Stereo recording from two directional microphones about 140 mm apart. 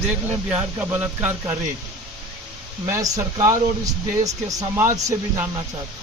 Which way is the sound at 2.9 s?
25° right (ahead or behind).